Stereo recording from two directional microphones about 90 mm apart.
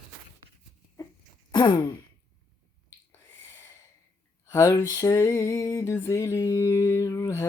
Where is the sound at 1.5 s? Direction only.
50° left (ahead or behind).